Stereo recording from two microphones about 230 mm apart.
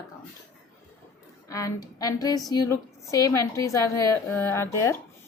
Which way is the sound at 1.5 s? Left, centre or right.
Centre.